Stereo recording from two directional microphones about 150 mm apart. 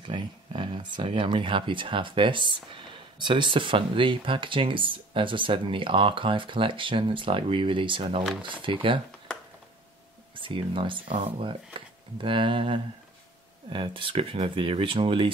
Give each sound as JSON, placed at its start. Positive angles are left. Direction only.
{"t": 0.0, "sound": "speech", "side_deg": -30}
{"t": 10.3, "sound": "speech", "side_deg": -35}